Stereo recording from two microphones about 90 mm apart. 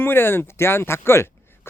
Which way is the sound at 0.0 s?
25° left (ahead or behind).